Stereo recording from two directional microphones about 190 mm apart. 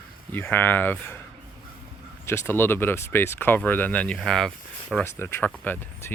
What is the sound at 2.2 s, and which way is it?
Speech, 15° left (ahead or behind).